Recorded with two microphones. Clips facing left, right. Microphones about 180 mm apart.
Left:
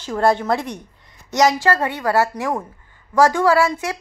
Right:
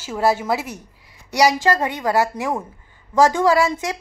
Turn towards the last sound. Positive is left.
turn(degrees=-20)  # may be behind; listen again after turning